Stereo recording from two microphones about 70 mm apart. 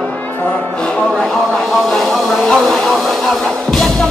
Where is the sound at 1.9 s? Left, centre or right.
Centre.